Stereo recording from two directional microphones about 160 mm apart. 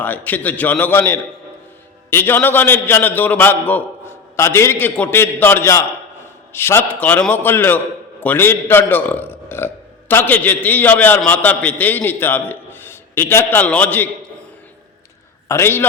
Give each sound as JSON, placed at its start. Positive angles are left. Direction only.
{"t": 0.0, "sound": "a man's voice", "side_deg": 10}
{"t": 15.4, "sound": "a man's voice", "side_deg": 15}